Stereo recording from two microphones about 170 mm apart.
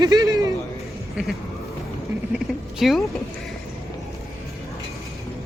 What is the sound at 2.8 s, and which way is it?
Speech, centre (ahead or behind).